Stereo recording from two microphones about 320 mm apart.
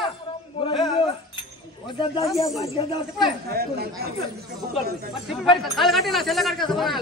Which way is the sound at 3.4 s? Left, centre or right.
Right.